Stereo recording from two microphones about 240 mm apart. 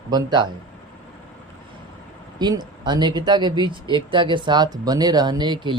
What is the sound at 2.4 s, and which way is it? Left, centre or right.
Speech, centre.